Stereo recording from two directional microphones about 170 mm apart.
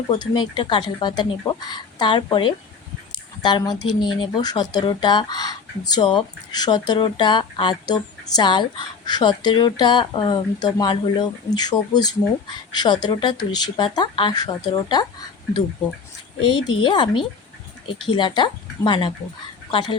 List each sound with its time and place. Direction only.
0.2 s speech: 25° left (ahead or behind)
16.4 s speech: 30° left (ahead or behind)